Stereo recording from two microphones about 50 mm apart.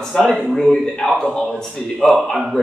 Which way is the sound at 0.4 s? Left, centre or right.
Centre.